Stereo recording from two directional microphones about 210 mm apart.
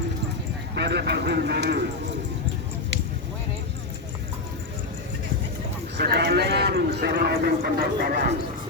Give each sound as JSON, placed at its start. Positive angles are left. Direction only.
{"t": 0.8, "sound": "speech", "side_deg": -55}
{"t": 6.0, "sound": "a man's voice", "side_deg": -50}